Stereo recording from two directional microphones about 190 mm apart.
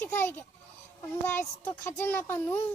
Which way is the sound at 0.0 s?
10° left (ahead or behind).